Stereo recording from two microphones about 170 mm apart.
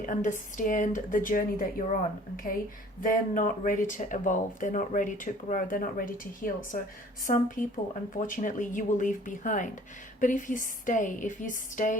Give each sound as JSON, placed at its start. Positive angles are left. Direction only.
{"t": 0.0, "sound": "speech", "side_deg": 50}